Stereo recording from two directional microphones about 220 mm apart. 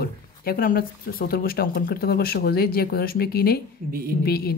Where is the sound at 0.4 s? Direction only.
40° left (ahead or behind).